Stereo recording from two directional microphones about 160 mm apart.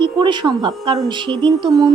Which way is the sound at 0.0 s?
30° right (ahead or behind).